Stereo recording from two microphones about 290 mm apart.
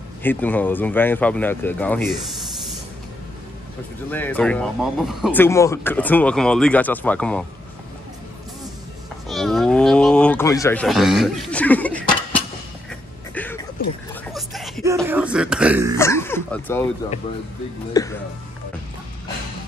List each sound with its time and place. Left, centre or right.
0.2 s speech: centre
4.1 s speech: centre
9.3 s speech: centre
13.3 s music: centre
13.8 s speech: left
14.3 s a sound: centre
15.0 s speech: centre
16.0 s speech: centre
17.9 s speech: centre